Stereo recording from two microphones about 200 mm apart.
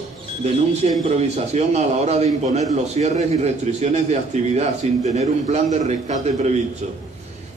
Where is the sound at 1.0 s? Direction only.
35° right (ahead or behind).